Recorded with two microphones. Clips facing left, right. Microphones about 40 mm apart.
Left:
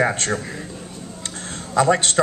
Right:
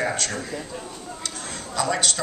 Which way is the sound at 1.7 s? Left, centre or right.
Left.